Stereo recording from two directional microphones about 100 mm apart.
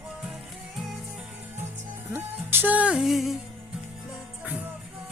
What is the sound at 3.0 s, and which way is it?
Music, centre (ahead or behind).